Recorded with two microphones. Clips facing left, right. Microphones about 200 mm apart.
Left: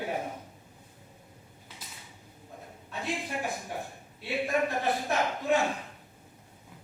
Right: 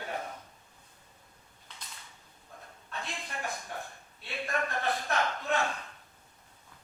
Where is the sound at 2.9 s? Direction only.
15° left (ahead or behind).